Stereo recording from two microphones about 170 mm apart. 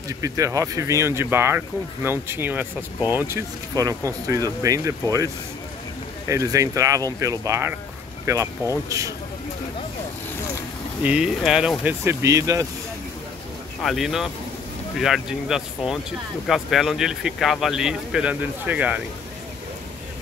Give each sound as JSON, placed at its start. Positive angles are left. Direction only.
{"t": 0.2, "sound": "speech", "side_deg": -20}
{"t": 6.2, "sound": "speech", "side_deg": -15}
{"t": 11.0, "sound": "speech", "side_deg": -5}
{"t": 11.8, "sound": "speech", "side_deg": -15}
{"t": 13.8, "sound": "speech", "side_deg": 0}